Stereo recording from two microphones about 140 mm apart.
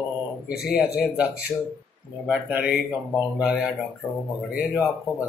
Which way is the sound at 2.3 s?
10° right (ahead or behind).